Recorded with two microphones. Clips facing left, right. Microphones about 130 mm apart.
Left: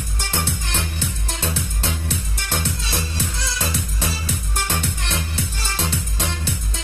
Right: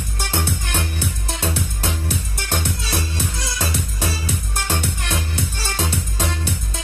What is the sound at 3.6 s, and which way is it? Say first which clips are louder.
Music: right 2 dB; 15° right (ahead or behind).